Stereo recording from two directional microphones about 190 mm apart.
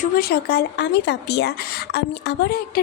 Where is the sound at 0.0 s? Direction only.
50° left (ahead or behind).